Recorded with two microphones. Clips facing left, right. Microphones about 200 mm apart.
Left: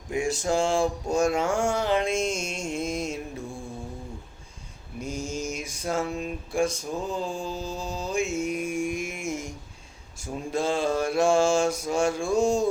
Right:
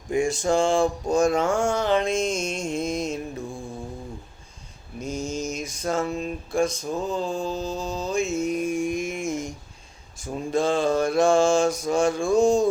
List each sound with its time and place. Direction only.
0.1 s a sound: 5° left (ahead or behind)
1.1 s mantra: 10° left (ahead or behind)
4.9 s mantra: 10° left (ahead or behind)
10.5 s mantra: 10° left (ahead or behind)